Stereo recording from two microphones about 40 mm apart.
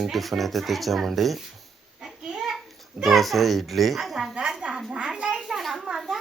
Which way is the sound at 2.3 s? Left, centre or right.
Centre.